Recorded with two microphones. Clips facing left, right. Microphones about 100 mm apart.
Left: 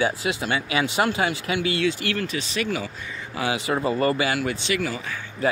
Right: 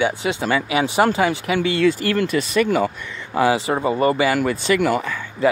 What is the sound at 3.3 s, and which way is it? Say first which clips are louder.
Speech: right 7 dB; 35° right (ahead or behind).